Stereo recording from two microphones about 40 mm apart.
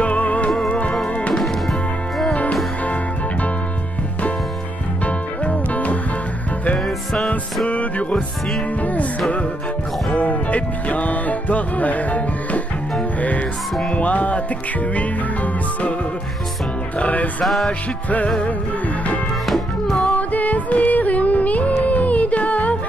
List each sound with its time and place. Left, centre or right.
0.0 s music: left
1.3 s music: centre
5.0 s music: left
7.6 s music: left
10.1 s music: left
13.9 s music: left
17.0 s music: left
19.4 s music: centre
20.1 s music: left